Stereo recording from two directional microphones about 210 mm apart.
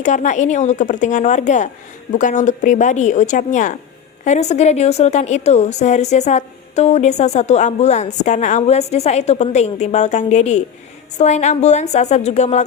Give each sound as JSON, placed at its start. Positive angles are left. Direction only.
{"t": 0.0, "sound": "a woman's voice", "side_deg": 35}